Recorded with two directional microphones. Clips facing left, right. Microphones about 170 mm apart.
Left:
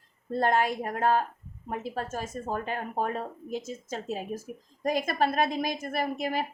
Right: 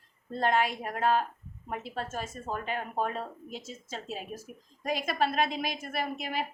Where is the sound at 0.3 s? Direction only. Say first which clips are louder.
Left 2 dB; 45° left (ahead or behind).